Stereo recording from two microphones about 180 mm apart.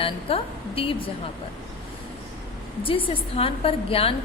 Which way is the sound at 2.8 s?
30° left (ahead or behind).